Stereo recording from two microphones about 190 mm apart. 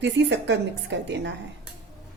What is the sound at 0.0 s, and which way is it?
A woman's voice, 65° right (ahead or behind).